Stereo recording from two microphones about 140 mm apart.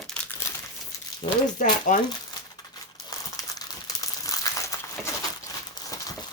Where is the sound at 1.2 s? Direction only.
45° left (ahead or behind).